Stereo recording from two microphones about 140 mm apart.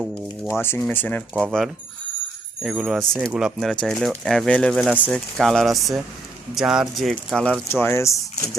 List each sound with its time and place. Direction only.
0.6 s speech: 15° left (ahead or behind)
1.3 s speech: 10° right (ahead or behind)
2.6 s speech: 5° right (ahead or behind)
7.7 s speech: 15° left (ahead or behind)